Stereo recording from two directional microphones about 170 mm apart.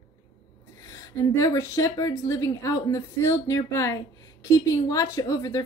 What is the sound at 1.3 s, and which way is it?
A woman's voice, 20° left (ahead or behind).